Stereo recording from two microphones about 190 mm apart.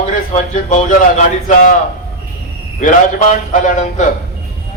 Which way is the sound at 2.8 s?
40° left (ahead or behind).